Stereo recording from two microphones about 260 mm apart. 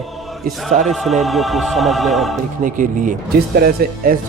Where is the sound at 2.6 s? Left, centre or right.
Right.